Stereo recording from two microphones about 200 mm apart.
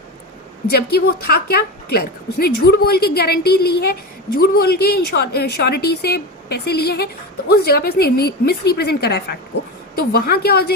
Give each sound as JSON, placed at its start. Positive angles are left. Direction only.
{"t": 0.7, "sound": "a woman's voice", "side_deg": 50}